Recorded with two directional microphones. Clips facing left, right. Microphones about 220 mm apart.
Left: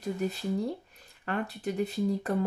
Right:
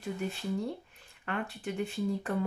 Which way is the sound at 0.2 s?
40° left (ahead or behind).